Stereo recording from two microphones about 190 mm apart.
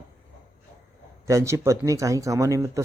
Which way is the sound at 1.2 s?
15° right (ahead or behind).